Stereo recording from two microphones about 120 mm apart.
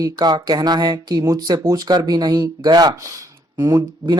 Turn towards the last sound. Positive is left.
turn(degrees=-35)  # may be behind; listen again after turning